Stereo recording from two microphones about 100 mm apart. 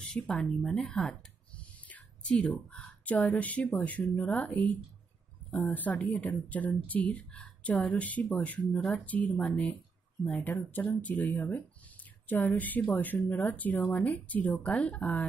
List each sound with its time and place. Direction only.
0.0 s speech: 5° left (ahead or behind)